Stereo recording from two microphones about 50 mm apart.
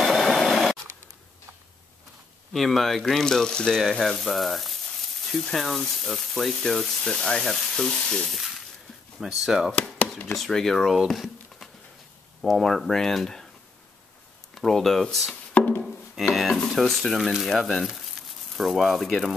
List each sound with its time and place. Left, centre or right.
0.0 s a sound: centre
2.5 s speech: centre
4.1 s speech: centre
5.3 s speech: centre
7.9 s frying: centre
9.2 s speech: centre
10.3 s speech: centre
11.1 s a sound: centre
12.4 s speech: centre
14.5 s speech: centre
15.5 s a sound: left
16.3 s speech: centre